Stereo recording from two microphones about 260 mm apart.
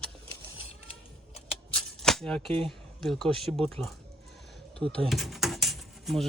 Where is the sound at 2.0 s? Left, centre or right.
Centre.